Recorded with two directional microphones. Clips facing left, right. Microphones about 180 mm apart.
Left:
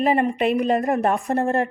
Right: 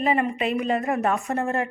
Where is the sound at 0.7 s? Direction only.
35° left (ahead or behind).